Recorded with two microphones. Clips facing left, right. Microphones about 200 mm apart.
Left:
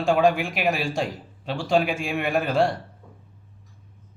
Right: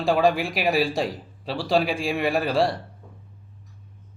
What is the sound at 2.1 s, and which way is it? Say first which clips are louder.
Speech: right 1 dB; centre (ahead or behind).